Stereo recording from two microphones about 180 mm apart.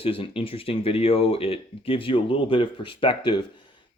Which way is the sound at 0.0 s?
30° left (ahead or behind).